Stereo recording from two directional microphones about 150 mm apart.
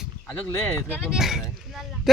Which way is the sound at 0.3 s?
15° left (ahead or behind).